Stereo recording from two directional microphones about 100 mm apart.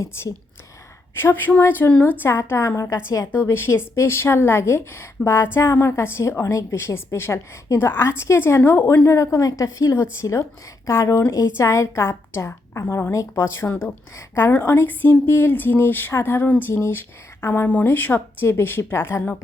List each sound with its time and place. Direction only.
0.0 s a woman's voice: 25° left (ahead or behind)